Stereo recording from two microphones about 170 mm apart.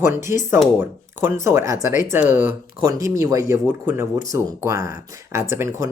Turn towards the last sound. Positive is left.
turn(degrees=-15)  # may be behind; listen again after turning